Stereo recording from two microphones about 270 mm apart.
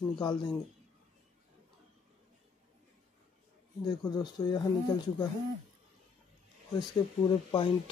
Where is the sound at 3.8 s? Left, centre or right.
Centre.